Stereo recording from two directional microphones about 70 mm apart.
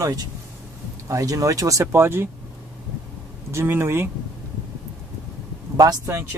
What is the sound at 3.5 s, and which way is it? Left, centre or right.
Speech, right.